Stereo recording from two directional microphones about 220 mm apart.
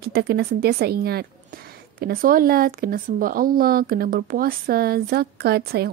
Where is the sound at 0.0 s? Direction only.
45° right (ahead or behind).